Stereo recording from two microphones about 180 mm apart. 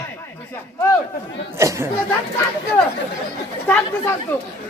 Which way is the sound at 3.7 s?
10° left (ahead or behind).